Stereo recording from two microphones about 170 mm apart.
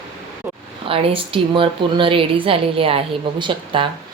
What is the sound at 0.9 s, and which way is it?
A woman's voice, 30° right (ahead or behind).